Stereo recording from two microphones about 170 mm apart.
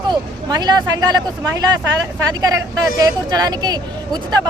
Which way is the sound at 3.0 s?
25° right (ahead or behind).